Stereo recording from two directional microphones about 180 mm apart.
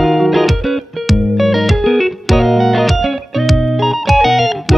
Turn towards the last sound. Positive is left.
turn(degrees=0)  # may be behind; listen again after turning